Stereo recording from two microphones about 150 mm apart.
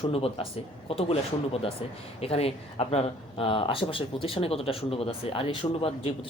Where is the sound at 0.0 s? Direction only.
40° left (ahead or behind).